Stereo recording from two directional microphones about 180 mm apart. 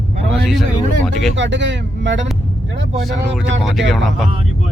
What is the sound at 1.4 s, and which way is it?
Speech, 85° right.